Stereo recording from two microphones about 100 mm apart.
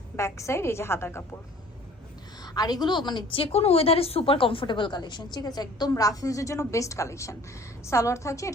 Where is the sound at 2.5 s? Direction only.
40° left (ahead or behind).